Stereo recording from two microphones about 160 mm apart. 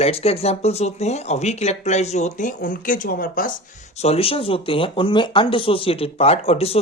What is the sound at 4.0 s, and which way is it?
Speech, 40° left (ahead or behind).